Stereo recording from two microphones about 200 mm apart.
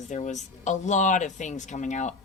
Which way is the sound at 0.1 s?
35° left (ahead or behind).